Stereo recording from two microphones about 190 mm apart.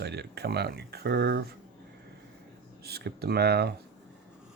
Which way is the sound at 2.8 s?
55° right (ahead or behind).